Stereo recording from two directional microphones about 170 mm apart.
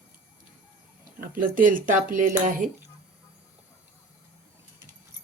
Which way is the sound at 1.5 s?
55° right (ahead or behind).